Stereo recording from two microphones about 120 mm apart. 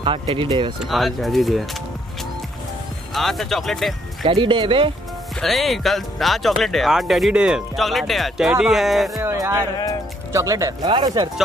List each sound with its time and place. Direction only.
0.0 s speech: 50° right (ahead or behind)
0.8 s speech: centre (ahead or behind)
3.2 s speech: centre (ahead or behind)
4.3 s speech: 40° right (ahead or behind)
5.4 s speech: centre (ahead or behind)
9.1 s speech: 25° right (ahead or behind)
10.9 s speech: 35° right (ahead or behind)